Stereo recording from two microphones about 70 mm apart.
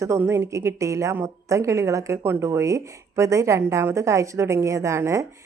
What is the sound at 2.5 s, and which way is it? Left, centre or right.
A woman's voice, right.